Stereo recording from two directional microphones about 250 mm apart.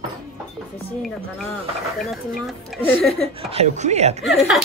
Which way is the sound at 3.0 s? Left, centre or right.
Centre.